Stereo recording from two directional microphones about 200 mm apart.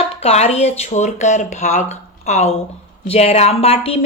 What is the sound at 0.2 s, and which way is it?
Speech, 35° left (ahead or behind).